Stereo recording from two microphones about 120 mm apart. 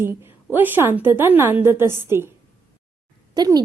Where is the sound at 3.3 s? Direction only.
35° right (ahead or behind).